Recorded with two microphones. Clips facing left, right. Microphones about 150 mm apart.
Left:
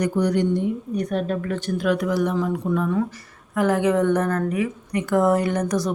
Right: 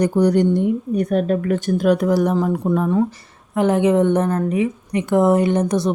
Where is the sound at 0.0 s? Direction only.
35° right (ahead or behind).